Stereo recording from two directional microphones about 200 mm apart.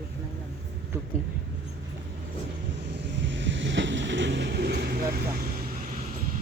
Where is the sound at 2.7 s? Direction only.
60° right (ahead or behind); by 6.1 s 45° right (ahead or behind).